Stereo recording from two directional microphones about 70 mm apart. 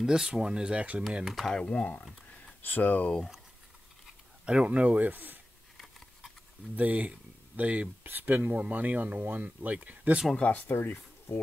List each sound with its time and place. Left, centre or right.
0.0 s speech: centre
1.1 s speech: centre
1.5 s speech: centre
4.5 s speech: centre
5.8 s patter: centre
6.8 s speech: right
10.3 s speech: centre
10.7 s speech: left